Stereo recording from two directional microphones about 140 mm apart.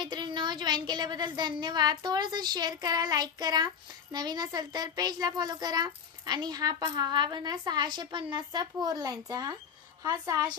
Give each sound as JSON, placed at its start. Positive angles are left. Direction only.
{"t": 0.0, "sound": "a woman's voice", "side_deg": -30}